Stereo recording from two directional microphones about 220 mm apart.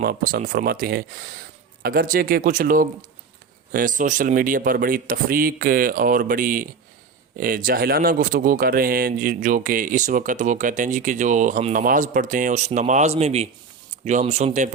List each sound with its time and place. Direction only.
0.0 s speech: 45° right (ahead or behind)